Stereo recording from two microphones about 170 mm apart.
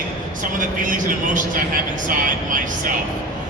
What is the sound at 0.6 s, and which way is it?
A man's voice, 50° right (ahead or behind).